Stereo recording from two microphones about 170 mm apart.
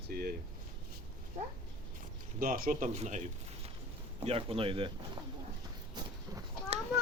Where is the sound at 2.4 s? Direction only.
55° right (ahead or behind).